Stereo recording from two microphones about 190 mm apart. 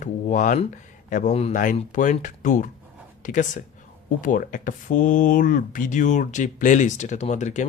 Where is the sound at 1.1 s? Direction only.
40° left (ahead or behind).